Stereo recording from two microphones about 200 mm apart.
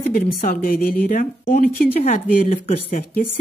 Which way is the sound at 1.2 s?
45° left (ahead or behind).